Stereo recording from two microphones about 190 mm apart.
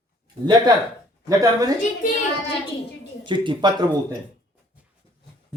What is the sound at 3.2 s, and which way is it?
Speech, 25° right (ahead or behind).